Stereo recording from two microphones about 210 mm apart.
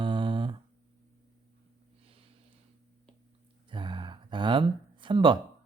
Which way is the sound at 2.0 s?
25° right (ahead or behind).